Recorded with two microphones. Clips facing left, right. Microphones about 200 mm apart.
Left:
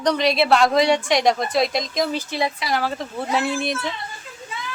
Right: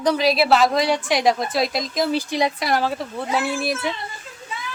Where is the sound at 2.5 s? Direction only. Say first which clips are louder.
Right 3 dB; 50° right (ahead or behind).